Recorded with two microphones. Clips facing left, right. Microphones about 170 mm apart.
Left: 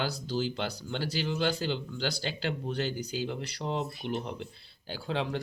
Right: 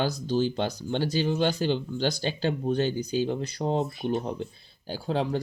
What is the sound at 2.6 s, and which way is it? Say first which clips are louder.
Speech: right 9 dB; 20° right (ahead or behind).